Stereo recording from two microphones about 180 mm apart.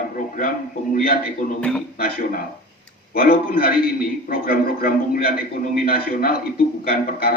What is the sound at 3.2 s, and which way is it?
A man's voice, 55° left (ahead or behind).